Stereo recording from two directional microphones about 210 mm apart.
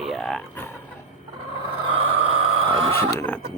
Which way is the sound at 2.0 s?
25° right (ahead or behind).